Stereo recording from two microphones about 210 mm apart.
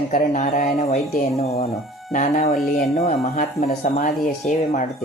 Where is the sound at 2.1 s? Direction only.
40° left (ahead or behind).